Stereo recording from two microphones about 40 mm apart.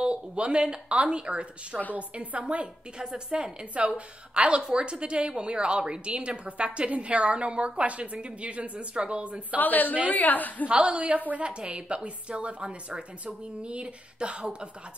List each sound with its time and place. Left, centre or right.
0.0 s a woman's voice: right
3.0 s a woman's voice: right
3.7 s a woman's voice: right
4.6 s a woman's voice: right
9.6 s a woman's voice: left
10.7 s a woman's voice: right
11.4 s a woman's voice: right